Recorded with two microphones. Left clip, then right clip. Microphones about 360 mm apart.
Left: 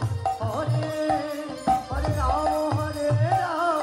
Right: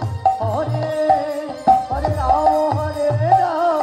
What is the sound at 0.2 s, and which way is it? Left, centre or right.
Music, right.